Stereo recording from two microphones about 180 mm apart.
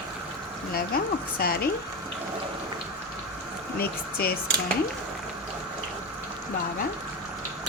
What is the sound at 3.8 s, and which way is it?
Speech, 60° left (ahead or behind).